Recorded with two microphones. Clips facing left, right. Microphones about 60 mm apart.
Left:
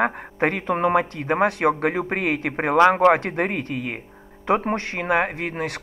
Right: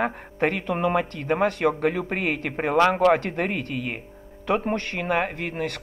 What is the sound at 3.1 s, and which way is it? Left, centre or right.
Speech, left.